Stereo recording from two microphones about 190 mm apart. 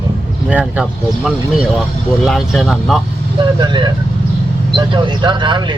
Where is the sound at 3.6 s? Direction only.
25° right (ahead or behind).